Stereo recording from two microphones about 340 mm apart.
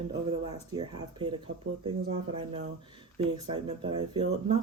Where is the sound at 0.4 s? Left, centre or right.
Centre.